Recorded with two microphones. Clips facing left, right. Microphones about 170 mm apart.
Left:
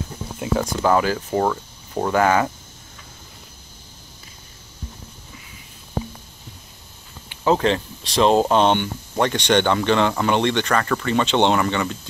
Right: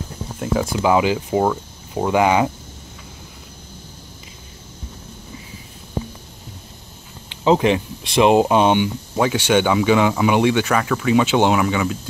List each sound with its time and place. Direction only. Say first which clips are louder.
0.4 s speech: right 1 dB; centre (ahead or behind)
7.2 s speech: right 3 dB; 15° right (ahead or behind)